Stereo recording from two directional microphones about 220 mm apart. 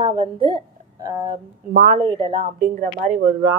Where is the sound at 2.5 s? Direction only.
35° right (ahead or behind).